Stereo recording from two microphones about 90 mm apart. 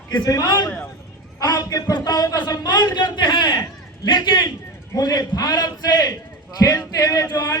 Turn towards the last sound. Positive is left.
turn(degrees=40)  # may be behind; listen again after turning